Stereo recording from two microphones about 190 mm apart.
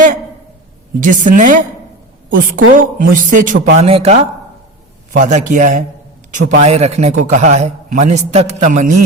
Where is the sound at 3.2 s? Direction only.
45° right (ahead or behind).